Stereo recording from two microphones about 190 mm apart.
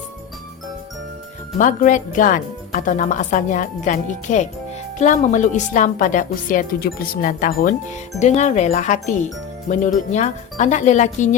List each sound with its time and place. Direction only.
1.5 s a woman's voice: 45° left (ahead or behind)